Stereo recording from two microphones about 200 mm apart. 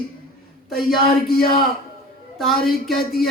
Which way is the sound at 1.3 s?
50° left (ahead or behind).